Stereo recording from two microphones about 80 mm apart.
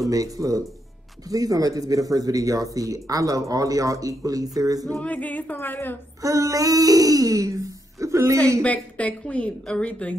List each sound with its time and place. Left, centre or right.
0.0 s speech: right
5.0 s a woman's voice: centre
6.2 s a man's voice: right
8.6 s a woman's voice: centre